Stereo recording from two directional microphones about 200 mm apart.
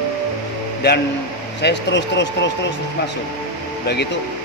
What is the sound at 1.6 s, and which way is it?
Speech, 60° left (ahead or behind).